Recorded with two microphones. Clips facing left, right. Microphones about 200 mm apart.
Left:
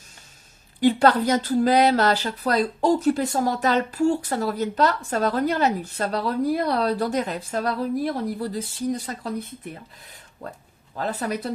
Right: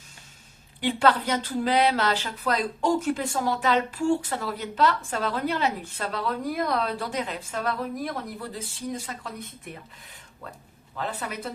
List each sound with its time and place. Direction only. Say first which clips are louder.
0.8 s speech: left 5 dB; 40° left (ahead or behind)
10.9 s speech: left 6 dB; 40° left (ahead or behind)